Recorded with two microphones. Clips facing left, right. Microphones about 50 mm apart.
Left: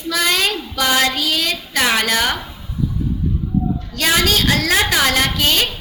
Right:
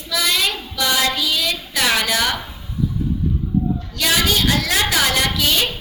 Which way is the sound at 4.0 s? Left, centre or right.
Left.